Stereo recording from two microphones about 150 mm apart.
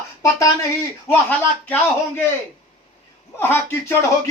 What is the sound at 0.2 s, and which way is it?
Speech, 20° left (ahead or behind).